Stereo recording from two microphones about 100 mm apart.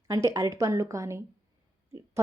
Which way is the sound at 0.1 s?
30° right (ahead or behind).